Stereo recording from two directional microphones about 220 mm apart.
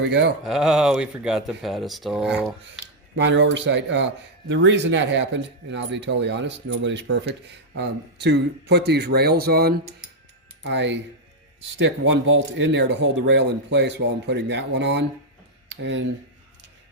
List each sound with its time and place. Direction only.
0.1 s speech: 50° right (ahead or behind)
0.4 s speech: centre (ahead or behind)
2.6 s speech: 55° right (ahead or behind)